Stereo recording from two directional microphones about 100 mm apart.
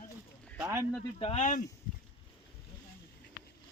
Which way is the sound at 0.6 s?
25° right (ahead or behind).